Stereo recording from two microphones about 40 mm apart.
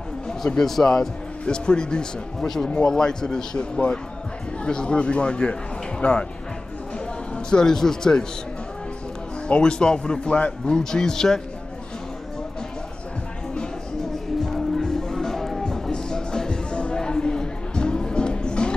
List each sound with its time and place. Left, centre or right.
0.6 s a man's voice: centre
1.4 s speech: left
2.4 s a man's voice: centre; by 6.2 s left
7.3 s a man's voice: centre
9.6 s speech: left
10.8 s a man's voice: centre
14.4 s music: centre